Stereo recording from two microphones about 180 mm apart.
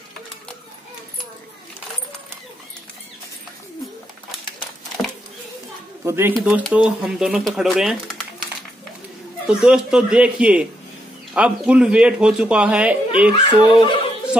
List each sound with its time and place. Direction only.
6.0 s speech: 15° right (ahead or behind)
9.5 s a man's voice: 5° right (ahead or behind)
13.7 s speech: 30° left (ahead or behind)